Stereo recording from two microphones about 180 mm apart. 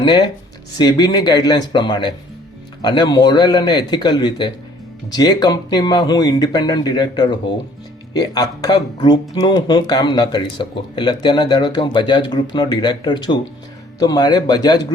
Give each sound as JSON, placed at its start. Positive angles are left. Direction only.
{"t": 0.0, "sound": "speech", "side_deg": 25}